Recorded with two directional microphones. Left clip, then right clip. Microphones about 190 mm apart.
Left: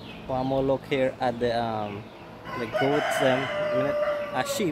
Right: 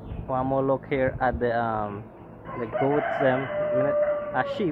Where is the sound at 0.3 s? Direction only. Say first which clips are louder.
Right 1 dB; 30° left (ahead or behind).